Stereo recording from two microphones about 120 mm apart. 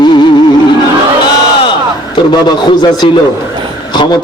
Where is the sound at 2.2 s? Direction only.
40° left (ahead or behind).